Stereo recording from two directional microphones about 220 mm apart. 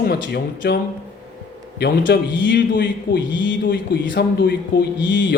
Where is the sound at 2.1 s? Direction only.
55° left (ahead or behind).